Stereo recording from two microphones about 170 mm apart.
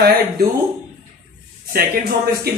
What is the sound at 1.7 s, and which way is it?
Speech, 60° right (ahead or behind).